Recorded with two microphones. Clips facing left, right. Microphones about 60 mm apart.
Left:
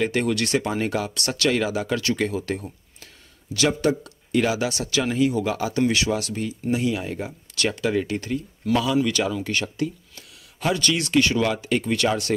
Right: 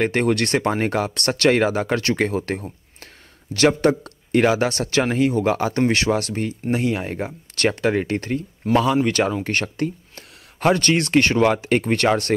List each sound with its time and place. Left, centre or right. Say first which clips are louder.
0.0 s speech: right 3 dB; right